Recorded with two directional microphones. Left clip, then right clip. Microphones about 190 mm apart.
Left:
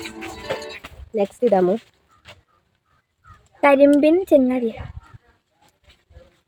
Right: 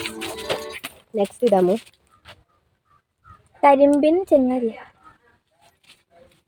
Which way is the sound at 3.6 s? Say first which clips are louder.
Left 1 dB; 10° left (ahead or behind).